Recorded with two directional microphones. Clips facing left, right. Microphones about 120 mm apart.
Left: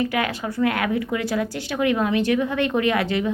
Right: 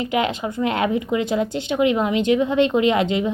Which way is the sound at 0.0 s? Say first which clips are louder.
Right 2 dB; 20° right (ahead or behind).